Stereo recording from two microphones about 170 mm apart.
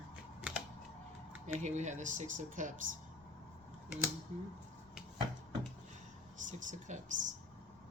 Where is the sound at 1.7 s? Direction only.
45° right (ahead or behind).